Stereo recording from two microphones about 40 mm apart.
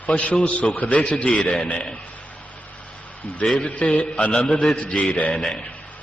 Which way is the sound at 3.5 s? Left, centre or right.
Left.